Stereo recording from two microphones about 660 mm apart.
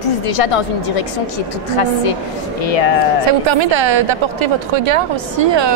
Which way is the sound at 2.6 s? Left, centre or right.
Left.